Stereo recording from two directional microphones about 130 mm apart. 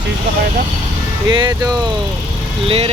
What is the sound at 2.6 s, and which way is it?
Speech, 45° right (ahead or behind).